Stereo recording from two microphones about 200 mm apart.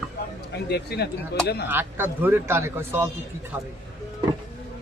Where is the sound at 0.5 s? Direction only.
55° left (ahead or behind).